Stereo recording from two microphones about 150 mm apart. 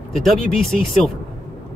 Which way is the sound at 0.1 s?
Centre (ahead or behind).